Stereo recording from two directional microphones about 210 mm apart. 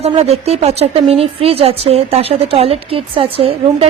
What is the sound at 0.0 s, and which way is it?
Speech, 30° right (ahead or behind).